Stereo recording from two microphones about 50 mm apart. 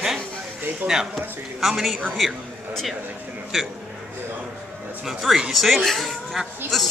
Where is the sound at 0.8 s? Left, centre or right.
Right.